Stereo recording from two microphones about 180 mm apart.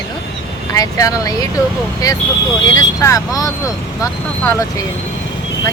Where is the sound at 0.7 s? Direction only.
20° left (ahead or behind).